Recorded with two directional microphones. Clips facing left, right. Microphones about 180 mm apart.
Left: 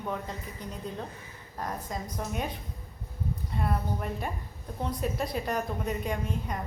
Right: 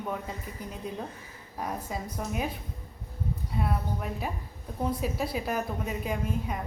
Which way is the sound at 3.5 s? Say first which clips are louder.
Even; centre (ahead or behind).